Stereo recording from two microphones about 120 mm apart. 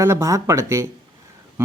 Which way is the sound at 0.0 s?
25° right (ahead or behind).